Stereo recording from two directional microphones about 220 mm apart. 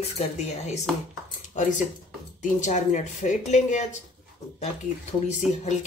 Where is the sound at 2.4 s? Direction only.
35° left (ahead or behind).